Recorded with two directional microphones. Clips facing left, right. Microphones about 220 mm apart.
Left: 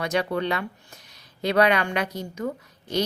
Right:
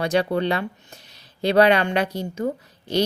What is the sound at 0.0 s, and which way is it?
A woman's voice, 30° right (ahead or behind).